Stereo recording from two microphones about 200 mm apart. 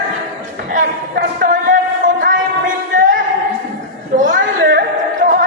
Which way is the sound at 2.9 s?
40° right (ahead or behind).